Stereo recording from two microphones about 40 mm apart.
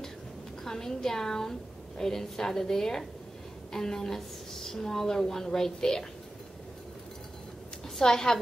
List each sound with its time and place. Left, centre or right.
0.7 s a woman's voice: centre
8.0 s a woman's voice: centre